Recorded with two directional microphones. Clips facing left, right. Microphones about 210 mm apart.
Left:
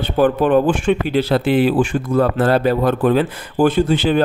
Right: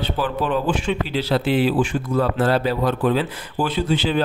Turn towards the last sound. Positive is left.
turn(degrees=50)  # may be behind; listen again after turning